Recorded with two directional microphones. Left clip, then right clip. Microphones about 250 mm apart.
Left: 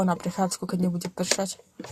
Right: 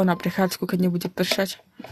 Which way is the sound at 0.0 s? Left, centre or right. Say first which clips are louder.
Right 4 dB; right.